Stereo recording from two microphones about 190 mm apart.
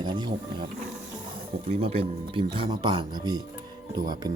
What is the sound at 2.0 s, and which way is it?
Speech, 25° right (ahead or behind).